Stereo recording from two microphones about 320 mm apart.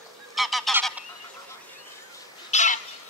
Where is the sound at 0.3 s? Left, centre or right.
Centre.